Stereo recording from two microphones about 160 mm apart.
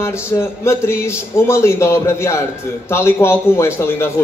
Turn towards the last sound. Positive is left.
turn(degrees=15)  # may be behind; listen again after turning